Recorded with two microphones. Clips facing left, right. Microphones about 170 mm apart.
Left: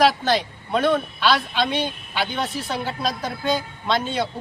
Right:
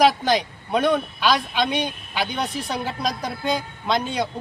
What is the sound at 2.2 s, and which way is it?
Speech, centre (ahead or behind).